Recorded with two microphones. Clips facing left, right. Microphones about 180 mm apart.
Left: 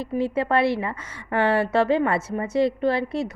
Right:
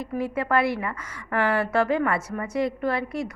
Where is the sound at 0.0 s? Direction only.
25° left (ahead or behind).